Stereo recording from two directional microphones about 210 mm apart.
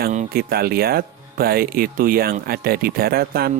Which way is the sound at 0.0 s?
40° right (ahead or behind).